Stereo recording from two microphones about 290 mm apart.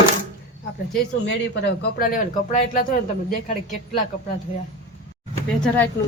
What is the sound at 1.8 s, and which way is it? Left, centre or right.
Speech, left.